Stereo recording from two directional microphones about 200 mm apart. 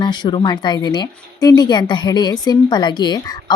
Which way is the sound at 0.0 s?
20° left (ahead or behind).